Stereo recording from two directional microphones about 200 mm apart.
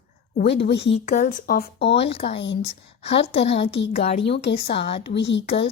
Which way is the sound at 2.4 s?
60° left (ahead or behind).